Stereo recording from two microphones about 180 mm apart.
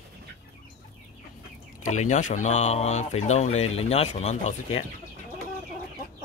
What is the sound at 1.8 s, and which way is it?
Speech, 40° left (ahead or behind).